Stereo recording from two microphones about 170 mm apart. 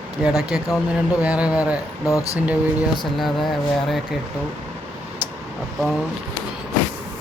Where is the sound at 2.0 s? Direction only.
20° left (ahead or behind).